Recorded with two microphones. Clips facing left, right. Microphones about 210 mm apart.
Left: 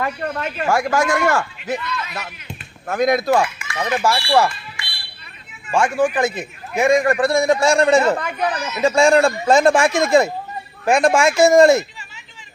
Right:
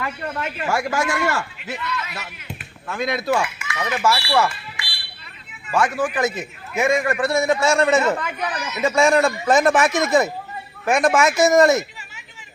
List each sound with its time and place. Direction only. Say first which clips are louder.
0.0 s a man's voice: left 4 dB; 40° left (ahead or behind)
2.8 s a man's voice: left 6 dB; 40° left (ahead or behind)
5.7 s a man's voice: left 3 dB; 30° left (ahead or behind)